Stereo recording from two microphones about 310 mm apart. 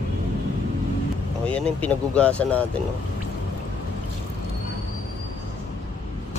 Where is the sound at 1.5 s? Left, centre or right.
Centre.